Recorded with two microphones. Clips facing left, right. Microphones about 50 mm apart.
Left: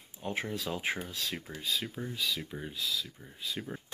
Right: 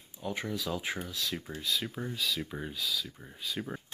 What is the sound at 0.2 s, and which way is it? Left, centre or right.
Speech, left.